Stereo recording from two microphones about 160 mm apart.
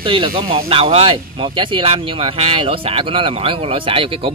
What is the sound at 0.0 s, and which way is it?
Speech, 30° right (ahead or behind).